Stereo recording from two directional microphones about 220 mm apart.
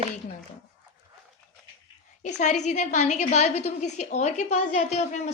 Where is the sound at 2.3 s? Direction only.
30° left (ahead or behind).